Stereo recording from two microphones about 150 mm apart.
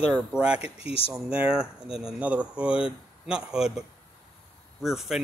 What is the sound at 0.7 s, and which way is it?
Speech, 40° left (ahead or behind).